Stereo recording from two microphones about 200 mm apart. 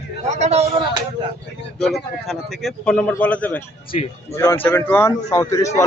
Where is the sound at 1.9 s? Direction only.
Centre (ahead or behind).